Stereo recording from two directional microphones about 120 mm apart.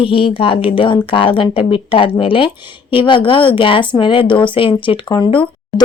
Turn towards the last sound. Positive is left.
turn(degrees=40)  # may be behind; listen again after turning